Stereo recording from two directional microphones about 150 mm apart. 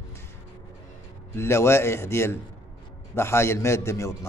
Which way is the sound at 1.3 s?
15° left (ahead or behind).